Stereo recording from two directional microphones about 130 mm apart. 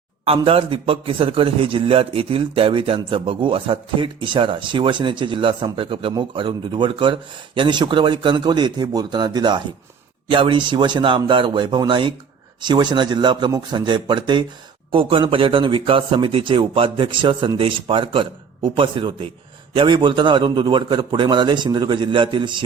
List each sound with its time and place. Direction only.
0.4 s a man's voice: 45° right (ahead or behind)